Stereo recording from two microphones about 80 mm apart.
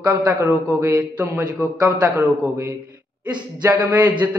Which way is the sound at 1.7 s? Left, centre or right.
Right.